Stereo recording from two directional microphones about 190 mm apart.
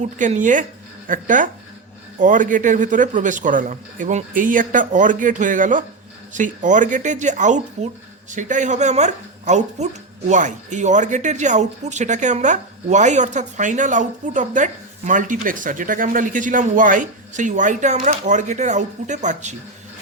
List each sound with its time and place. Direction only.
0.0 s a man's voice: 40° right (ahead or behind)